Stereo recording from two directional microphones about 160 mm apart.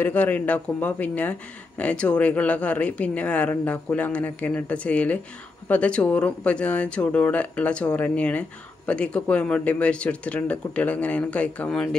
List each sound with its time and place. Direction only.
0.0 s speech: 10° left (ahead or behind)